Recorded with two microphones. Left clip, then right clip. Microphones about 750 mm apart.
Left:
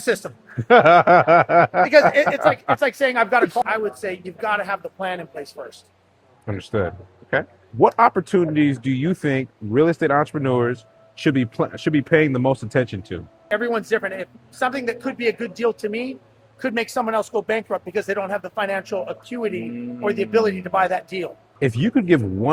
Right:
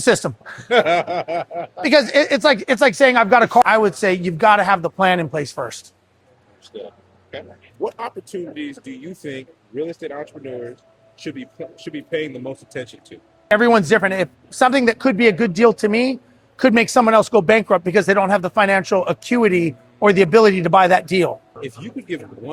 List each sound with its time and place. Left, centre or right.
0.0 s speech: right
0.7 s snicker: left
1.8 s speech: right
7.9 s speech: left
13.6 s speech: right
21.6 s speech: left